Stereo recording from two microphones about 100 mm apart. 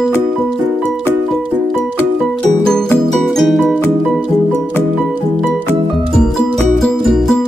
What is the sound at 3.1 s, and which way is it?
Music, 5° left (ahead or behind).